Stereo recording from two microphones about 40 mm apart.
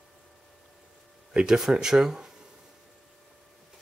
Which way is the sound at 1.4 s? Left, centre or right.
Centre.